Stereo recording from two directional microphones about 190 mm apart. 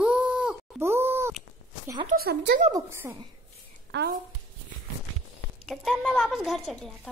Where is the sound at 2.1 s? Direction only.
60° right (ahead or behind).